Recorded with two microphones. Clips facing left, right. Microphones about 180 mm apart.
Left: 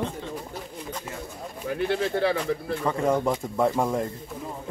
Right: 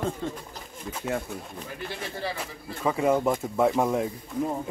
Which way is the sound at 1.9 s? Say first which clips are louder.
Left 10 dB; 70° left (ahead or behind).